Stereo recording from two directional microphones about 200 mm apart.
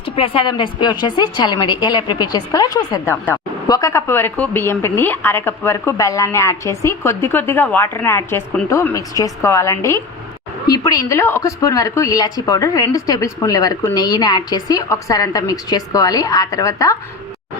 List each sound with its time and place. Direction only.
0.0 s a woman's voice: 25° left (ahead or behind)